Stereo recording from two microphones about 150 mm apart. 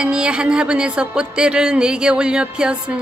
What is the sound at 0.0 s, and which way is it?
Speech, 5° right (ahead or behind).